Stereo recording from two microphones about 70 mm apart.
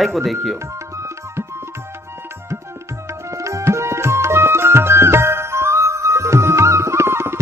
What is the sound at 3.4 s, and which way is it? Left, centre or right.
Music, right.